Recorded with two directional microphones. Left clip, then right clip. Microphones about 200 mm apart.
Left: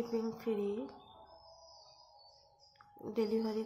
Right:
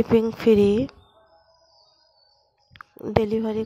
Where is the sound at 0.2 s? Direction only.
50° right (ahead or behind).